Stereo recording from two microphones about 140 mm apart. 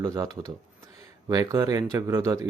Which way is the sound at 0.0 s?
25° right (ahead or behind).